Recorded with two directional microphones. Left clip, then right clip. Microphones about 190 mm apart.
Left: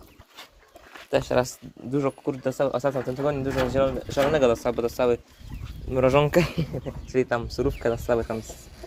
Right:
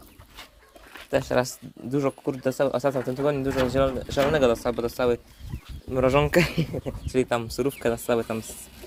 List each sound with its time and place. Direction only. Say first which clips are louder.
1.1 s speech: left 1 dB; 10° left (ahead or behind)
1.4 s speech: left 1 dB; 10° right (ahead or behind)
4.3 s speech: left 1 dB; centre (ahead or behind)
6.5 s speech: right 2 dB; 45° right (ahead or behind)
7.1 s speech: even; 5° right (ahead or behind)